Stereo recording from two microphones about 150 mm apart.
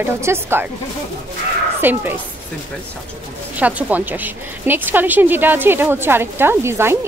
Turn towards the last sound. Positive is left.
turn(degrees=-15)  # may be behind; listen again after turning